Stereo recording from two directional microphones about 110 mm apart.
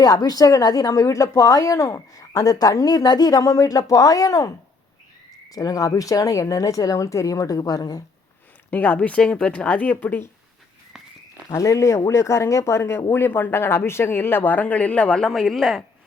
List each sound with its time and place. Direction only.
0.0 s speech: 35° left (ahead or behind)
8.7 s speech: 15° left (ahead or behind)
11.4 s speech: 30° left (ahead or behind); by 15.8 s 5° left (ahead or behind)